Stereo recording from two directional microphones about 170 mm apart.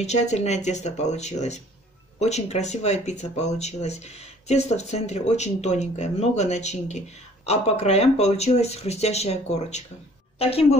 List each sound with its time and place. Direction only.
0.0 s speech: 40° left (ahead or behind)